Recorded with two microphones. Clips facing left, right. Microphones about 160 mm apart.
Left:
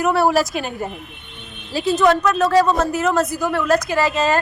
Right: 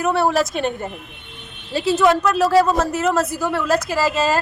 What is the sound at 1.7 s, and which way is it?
A man's voice, 5° right (ahead or behind).